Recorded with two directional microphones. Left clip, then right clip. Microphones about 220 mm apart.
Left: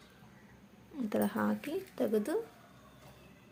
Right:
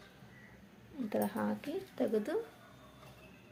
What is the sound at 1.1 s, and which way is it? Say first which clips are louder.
Speech: left 2 dB; 10° left (ahead or behind).